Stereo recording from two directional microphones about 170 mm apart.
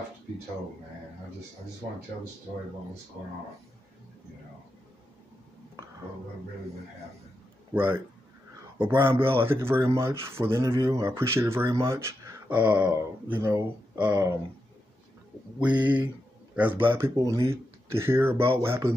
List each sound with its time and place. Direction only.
7.7 s speech: 10° right (ahead or behind)
15.6 s speech: 10° right (ahead or behind)